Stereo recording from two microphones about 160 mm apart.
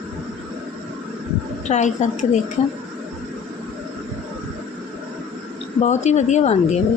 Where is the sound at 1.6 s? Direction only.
45° left (ahead or behind).